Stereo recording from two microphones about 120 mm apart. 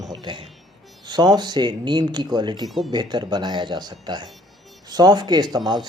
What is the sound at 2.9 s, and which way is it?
Speech, 35° right (ahead or behind).